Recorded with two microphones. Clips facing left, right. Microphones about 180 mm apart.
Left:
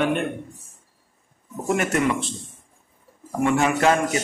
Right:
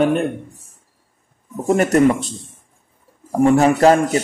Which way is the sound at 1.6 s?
35° right (ahead or behind).